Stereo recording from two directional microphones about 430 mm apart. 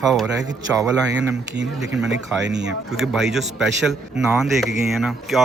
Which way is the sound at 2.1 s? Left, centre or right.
Right.